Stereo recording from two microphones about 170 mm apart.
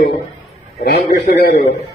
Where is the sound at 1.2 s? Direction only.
60° left (ahead or behind).